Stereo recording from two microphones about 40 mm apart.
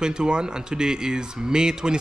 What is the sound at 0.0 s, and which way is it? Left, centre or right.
Speech, centre.